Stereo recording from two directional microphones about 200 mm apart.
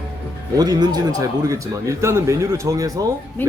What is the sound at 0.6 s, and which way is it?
A man's voice, 20° right (ahead or behind).